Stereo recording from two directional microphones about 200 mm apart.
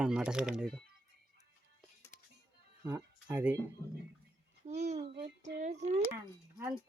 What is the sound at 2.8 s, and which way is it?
Speech, 15° right (ahead or behind).